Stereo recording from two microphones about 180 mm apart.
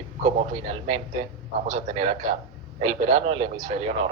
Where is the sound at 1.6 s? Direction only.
40° right (ahead or behind).